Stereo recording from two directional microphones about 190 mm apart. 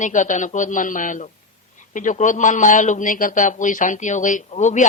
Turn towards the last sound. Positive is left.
turn(degrees=40)  # may be behind; listen again after turning